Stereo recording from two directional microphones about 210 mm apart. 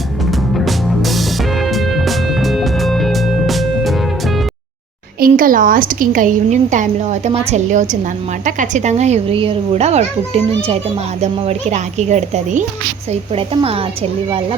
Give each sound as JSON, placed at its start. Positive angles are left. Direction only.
{"t": 0.3, "sound": "music", "side_deg": 0}
{"t": 5.2, "sound": "a woman's voice", "side_deg": -40}